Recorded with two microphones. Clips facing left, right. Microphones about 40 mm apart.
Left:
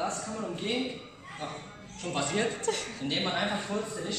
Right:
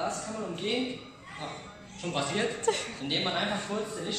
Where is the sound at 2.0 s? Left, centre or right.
Right.